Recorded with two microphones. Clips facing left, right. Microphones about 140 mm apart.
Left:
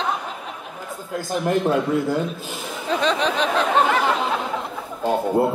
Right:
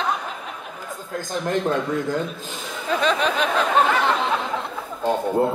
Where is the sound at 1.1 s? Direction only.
10° left (ahead or behind).